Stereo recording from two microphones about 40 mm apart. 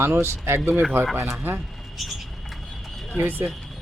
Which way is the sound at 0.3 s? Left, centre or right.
Right.